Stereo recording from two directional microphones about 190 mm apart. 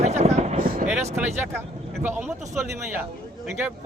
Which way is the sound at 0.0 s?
35° right (ahead or behind).